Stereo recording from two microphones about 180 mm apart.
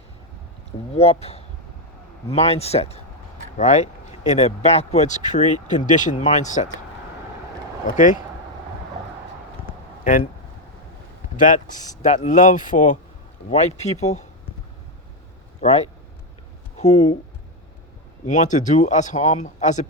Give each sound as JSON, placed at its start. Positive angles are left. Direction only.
{"t": 0.9, "sound": "speech", "side_deg": 35}
{"t": 7.9, "sound": "speech", "side_deg": 45}
{"t": 10.0, "sound": "speech", "side_deg": 45}
{"t": 11.3, "sound": "speech", "side_deg": 45}
{"t": 15.6, "sound": "speech", "side_deg": 40}
{"t": 16.7, "sound": "a sound", "side_deg": 40}
{"t": 18.3, "sound": "speech", "side_deg": 45}